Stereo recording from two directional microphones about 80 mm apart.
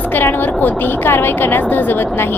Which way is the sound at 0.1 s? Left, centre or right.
Left.